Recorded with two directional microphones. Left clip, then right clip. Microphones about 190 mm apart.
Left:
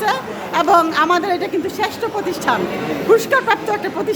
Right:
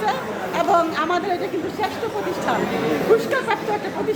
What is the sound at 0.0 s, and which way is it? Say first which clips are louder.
Chatter: left 3 dB; 45° left (ahead or behind).